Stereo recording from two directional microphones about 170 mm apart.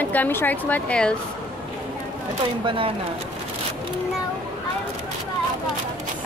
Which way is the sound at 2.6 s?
30° right (ahead or behind).